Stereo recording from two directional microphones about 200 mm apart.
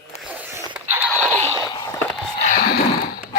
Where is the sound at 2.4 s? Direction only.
50° left (ahead or behind).